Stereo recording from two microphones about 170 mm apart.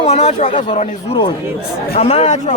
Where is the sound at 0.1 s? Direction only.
40° left (ahead or behind).